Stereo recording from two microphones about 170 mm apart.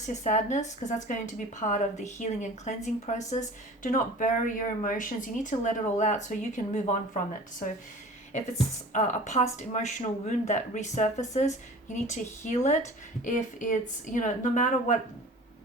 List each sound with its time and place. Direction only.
0.0 s speech: 45° left (ahead or behind)
8.9 s speech: 45° left (ahead or behind)